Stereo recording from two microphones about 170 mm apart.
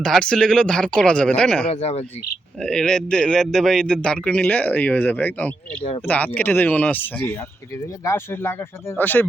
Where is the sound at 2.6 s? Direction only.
5° left (ahead or behind).